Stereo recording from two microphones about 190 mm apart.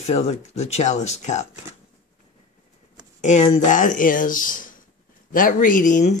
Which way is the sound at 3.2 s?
40° left (ahead or behind).